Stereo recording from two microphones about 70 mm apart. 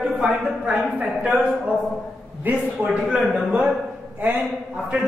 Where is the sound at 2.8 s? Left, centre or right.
Centre.